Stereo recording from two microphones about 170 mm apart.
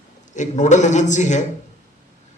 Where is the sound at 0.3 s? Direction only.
45° left (ahead or behind).